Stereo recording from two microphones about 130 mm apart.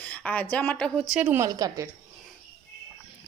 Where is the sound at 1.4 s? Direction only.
25° right (ahead or behind).